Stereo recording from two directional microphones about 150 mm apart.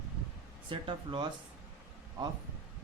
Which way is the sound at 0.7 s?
35° right (ahead or behind).